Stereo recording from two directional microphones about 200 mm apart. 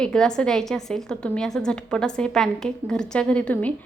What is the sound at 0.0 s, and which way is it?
Speech, 5° left (ahead or behind).